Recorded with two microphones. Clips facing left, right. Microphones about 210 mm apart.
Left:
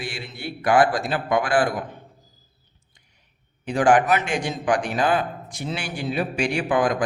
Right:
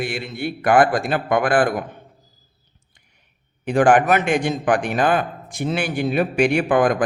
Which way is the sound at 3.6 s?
55° right (ahead or behind).